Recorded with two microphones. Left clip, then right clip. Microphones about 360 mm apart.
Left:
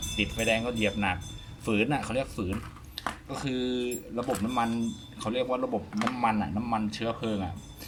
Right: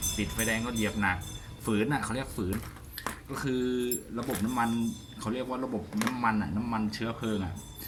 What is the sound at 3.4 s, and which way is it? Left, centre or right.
Speech, centre.